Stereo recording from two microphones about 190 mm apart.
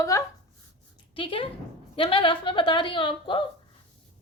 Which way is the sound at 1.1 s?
30° left (ahead or behind).